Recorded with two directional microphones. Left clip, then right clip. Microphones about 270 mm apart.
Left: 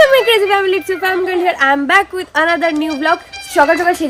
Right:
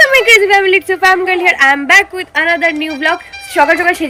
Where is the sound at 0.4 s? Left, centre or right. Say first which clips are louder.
Right 4 dB; centre.